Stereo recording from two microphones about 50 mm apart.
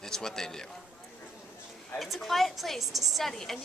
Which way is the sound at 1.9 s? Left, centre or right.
Centre.